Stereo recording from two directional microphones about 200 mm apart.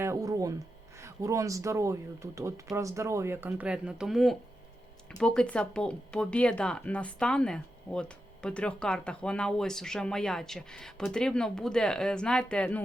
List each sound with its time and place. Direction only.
0.0 s speech: 15° right (ahead or behind); by 12.8 s 5° left (ahead or behind)